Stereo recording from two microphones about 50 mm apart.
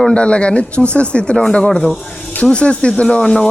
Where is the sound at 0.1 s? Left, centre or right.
Left.